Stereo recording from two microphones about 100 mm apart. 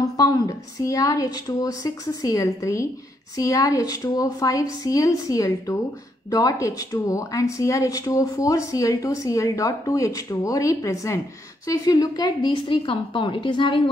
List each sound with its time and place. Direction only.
0.2 s a woman's voice: 35° left (ahead or behind); by 13.7 s 50° left (ahead or behind)